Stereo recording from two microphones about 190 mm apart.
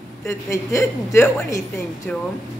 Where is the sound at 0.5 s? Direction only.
15° left (ahead or behind).